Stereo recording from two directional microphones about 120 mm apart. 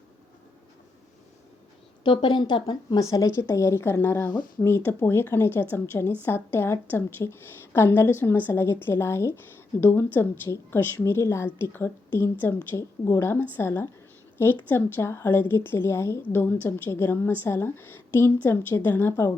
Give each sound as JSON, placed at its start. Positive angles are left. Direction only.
{"t": 2.0, "sound": "speech", "side_deg": 40}
{"t": 3.0, "sound": "a woman's voice", "side_deg": 30}